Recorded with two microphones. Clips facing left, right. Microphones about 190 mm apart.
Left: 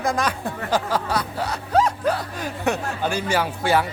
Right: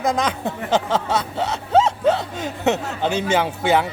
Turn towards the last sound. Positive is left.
turn(degrees=-20)  # may be behind; listen again after turning